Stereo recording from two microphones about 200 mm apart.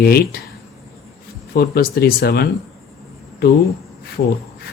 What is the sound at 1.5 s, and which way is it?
Speech, 50° left (ahead or behind).